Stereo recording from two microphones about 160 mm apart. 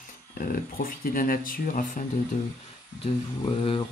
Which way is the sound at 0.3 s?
65° left (ahead or behind).